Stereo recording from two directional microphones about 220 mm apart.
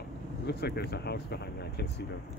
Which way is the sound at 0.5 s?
45° left (ahead or behind).